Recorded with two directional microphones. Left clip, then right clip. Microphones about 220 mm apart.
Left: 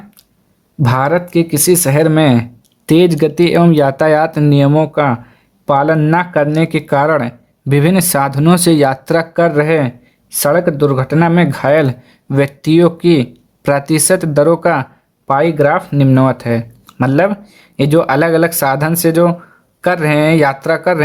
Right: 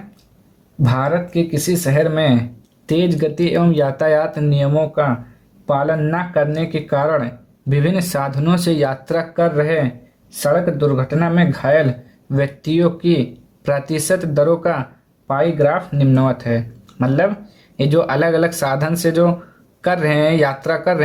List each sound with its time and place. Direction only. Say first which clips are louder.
0.8 s speech: left 5 dB; 45° left (ahead or behind)